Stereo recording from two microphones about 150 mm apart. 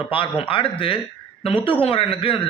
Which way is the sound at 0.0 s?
35° left (ahead or behind).